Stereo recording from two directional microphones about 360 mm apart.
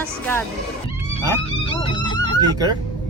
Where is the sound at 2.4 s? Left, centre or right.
Centre.